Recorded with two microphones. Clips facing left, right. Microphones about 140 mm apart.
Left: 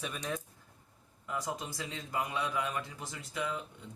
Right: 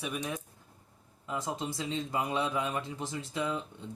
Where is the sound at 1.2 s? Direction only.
25° right (ahead or behind).